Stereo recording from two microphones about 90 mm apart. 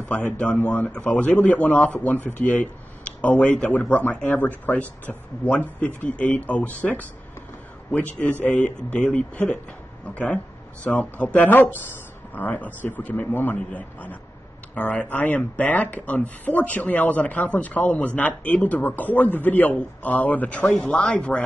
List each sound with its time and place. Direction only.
0.1 s a man's voice: 15° left (ahead or behind)